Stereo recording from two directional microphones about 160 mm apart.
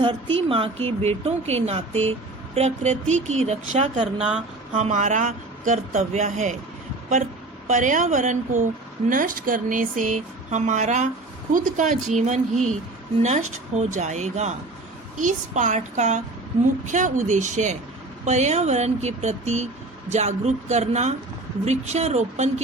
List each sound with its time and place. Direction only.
0.0 s a woman's voice: 35° right (ahead or behind); by 4.0 s 50° right (ahead or behind)
4.2 s speech: 5° right (ahead or behind)
4.7 s speech: 45° right (ahead or behind)
7.7 s speech: 50° right (ahead or behind)